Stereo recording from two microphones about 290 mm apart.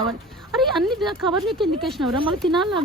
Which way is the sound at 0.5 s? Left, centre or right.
Centre.